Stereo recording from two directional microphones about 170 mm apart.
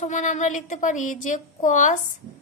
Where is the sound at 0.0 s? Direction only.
45° left (ahead or behind).